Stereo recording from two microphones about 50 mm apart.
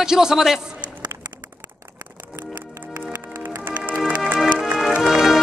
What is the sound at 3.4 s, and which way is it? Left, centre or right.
Music, right.